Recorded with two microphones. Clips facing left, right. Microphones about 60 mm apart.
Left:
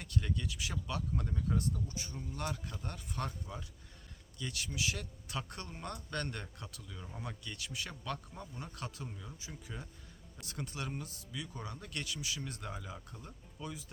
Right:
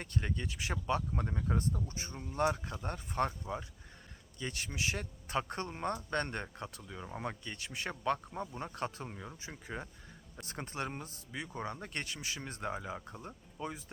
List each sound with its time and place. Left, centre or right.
0.0 s a man's voice: right